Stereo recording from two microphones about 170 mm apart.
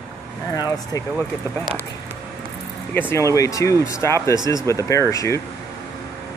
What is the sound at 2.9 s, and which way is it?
Speech, 10° left (ahead or behind).